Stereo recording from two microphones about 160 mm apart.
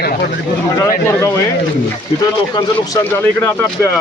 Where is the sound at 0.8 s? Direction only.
15° left (ahead or behind).